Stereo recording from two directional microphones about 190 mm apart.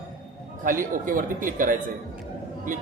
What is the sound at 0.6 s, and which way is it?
A man's voice, 45° right (ahead or behind).